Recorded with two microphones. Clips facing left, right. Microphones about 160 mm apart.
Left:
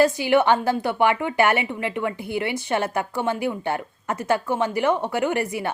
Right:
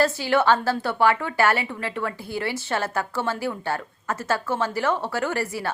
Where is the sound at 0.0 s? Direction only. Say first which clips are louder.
Left 3 dB; 15° left (ahead or behind).